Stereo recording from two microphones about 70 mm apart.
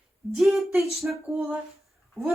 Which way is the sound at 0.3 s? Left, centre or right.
Centre.